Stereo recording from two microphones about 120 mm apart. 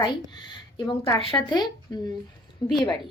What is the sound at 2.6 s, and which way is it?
Speech, 30° left (ahead or behind).